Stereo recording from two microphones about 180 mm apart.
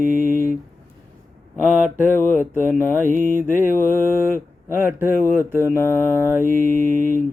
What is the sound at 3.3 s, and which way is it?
Mantra, 10° right (ahead or behind).